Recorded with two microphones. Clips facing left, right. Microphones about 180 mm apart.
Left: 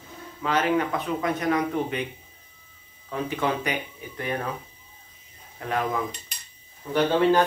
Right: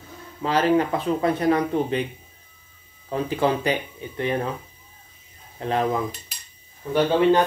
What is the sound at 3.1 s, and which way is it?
Speech, 30° right (ahead or behind).